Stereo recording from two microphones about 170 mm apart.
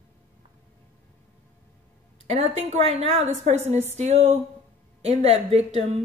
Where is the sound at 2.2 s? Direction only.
35° right (ahead or behind).